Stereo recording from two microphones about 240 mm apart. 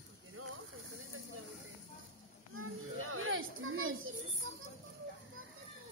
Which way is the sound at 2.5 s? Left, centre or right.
Right.